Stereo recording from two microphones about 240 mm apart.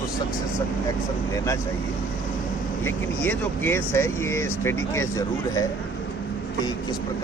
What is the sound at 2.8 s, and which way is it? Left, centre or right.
Speech, centre.